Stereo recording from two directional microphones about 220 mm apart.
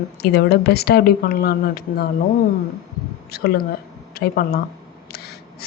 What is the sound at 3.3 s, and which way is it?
Speech, 45° left (ahead or behind).